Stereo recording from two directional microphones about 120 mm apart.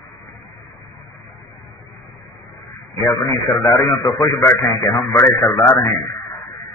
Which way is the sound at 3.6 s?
25° left (ahead or behind).